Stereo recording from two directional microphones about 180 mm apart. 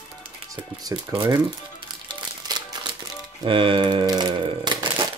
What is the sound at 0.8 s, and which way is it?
Speech, 20° right (ahead or behind).